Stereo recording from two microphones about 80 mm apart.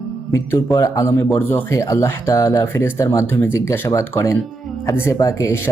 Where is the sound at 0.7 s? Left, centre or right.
Left.